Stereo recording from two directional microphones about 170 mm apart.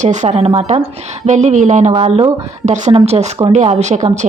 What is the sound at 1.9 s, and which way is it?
A woman's voice, 35° right (ahead or behind).